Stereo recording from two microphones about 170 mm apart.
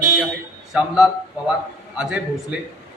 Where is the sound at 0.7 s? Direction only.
5° right (ahead or behind).